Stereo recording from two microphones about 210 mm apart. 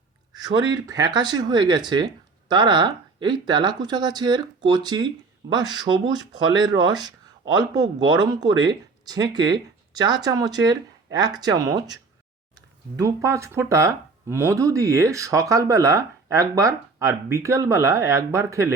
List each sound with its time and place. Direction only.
0.3 s speech: 20° right (ahead or behind)